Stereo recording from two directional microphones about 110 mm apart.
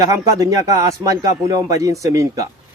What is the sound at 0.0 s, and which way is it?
Speech, 30° right (ahead or behind).